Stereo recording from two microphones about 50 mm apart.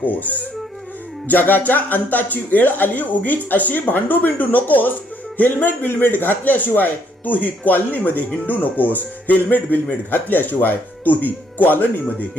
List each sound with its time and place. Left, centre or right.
0.0 s speech: left